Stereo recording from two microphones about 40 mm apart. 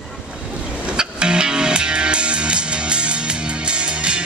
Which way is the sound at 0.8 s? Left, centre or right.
Right.